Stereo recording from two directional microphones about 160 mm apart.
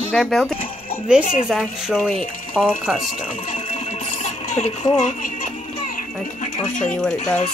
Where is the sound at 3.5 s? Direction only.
45° left (ahead or behind).